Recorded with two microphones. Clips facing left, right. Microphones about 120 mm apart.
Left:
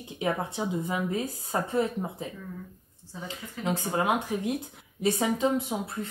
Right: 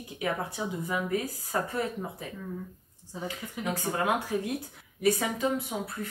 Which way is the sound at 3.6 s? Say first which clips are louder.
Left 2 dB; 20° left (ahead or behind).